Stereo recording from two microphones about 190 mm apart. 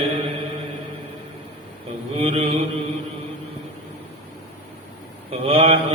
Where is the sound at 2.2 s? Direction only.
30° right (ahead or behind).